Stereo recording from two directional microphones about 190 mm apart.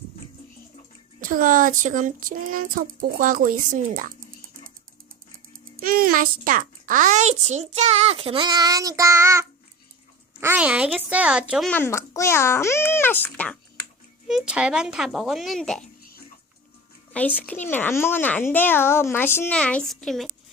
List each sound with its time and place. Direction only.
1.2 s child singing: 45° right (ahead or behind)
5.8 s a child's voice: 50° right (ahead or behind); by 11.7 s 5° right (ahead or behind)
11.7 s a woman's voice: 15° left (ahead or behind)
14.3 s a child's voice: 5° right (ahead or behind)
17.1 s a woman's voice: 10° left (ahead or behind)